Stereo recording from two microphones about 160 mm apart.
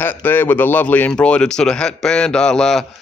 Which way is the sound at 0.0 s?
15° left (ahead or behind).